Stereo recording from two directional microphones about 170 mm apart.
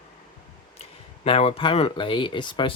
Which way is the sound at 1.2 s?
35° left (ahead or behind).